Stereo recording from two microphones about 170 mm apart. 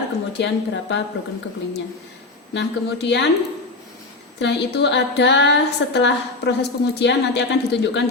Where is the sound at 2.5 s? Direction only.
90° left.